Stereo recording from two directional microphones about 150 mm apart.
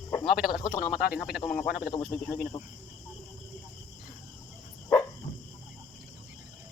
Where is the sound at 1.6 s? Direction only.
90° left.